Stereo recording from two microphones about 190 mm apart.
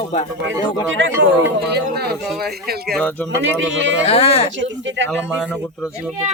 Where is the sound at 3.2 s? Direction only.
80° right.